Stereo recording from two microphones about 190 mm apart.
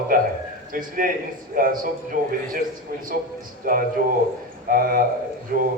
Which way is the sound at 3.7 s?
50° right (ahead or behind).